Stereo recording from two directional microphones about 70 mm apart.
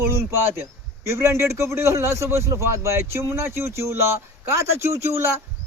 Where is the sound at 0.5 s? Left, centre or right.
Right.